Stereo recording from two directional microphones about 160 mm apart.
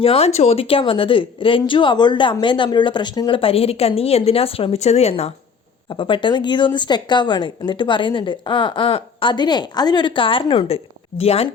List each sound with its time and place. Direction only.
0.0 s speech: 40° left (ahead or behind)